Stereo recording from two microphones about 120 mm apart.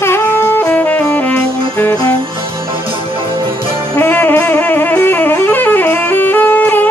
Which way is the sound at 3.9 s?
15° left (ahead or behind).